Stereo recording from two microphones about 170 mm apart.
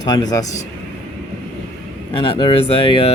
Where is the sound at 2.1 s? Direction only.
30° left (ahead or behind).